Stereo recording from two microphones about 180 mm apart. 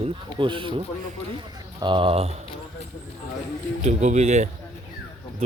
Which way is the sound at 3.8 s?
40° right (ahead or behind).